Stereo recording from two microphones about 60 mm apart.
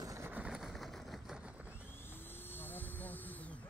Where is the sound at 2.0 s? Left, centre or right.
Left.